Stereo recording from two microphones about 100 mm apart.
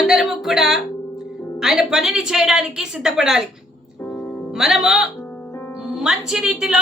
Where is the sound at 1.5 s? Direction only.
5° right (ahead or behind).